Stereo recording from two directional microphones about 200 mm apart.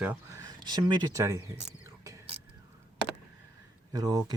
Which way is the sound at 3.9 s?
20° right (ahead or behind).